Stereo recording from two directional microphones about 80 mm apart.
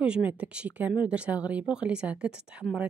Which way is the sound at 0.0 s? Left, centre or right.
Centre.